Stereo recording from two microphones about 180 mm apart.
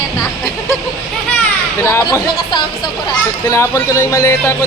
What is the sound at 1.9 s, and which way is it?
Speech, 15° left (ahead or behind).